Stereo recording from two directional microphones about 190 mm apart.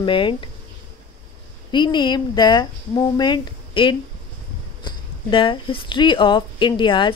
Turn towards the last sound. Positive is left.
turn(degrees=25)  # may be behind; listen again after turning